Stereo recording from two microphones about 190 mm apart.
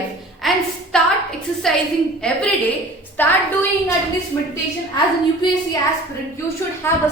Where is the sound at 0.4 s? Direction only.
Centre (ahead or behind).